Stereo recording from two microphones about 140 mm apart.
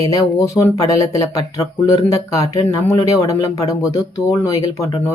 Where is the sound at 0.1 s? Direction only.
20° left (ahead or behind).